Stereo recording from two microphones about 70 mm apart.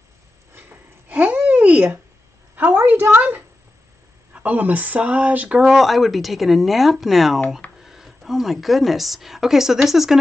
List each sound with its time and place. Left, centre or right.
0.6 s a sound: right
2.5 s speech: right
5.6 s a woman's voice: centre